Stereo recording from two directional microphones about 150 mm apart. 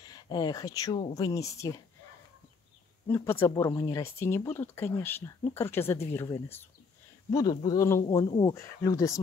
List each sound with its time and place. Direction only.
0.0 s speech: 25° left (ahead or behind)
3.1 s speech: 15° left (ahead or behind)
7.2 s speech: 30° left (ahead or behind)